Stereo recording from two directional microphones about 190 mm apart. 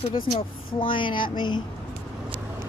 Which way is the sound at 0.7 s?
25° left (ahead or behind).